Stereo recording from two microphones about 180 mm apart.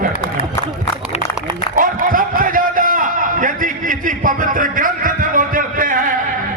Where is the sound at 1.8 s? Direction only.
50° right (ahead or behind).